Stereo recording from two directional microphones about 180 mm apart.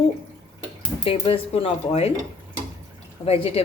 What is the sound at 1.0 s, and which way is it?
Speech, 30° left (ahead or behind).